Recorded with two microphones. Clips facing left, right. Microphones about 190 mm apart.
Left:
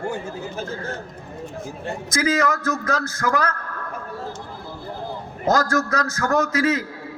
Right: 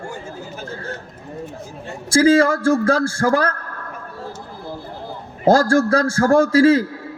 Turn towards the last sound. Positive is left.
turn(degrees=-30)  # may be behind; listen again after turning